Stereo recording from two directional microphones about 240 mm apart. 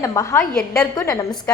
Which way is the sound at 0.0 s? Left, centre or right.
Centre.